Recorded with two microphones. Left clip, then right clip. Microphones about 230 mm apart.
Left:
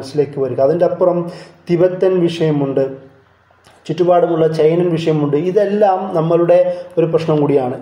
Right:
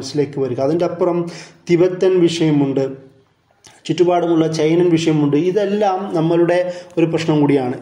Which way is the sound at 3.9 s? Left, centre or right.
Right.